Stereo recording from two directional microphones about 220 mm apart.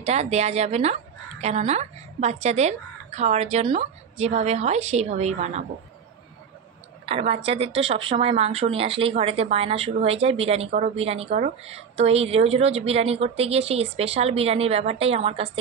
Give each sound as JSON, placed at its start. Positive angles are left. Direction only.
{"t": 0.0, "sound": "a woman's voice", "side_deg": -30}
{"t": 7.1, "sound": "speech", "side_deg": -25}